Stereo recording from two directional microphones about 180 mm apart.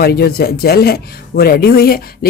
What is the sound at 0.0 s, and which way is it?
Speech, 60° left (ahead or behind).